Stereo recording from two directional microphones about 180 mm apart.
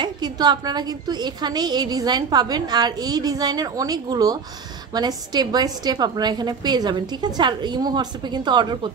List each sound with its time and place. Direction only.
0.0 s a woman's voice: 25° right (ahead or behind)